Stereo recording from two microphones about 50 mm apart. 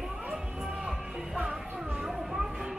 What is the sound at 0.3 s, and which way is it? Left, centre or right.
Music, centre.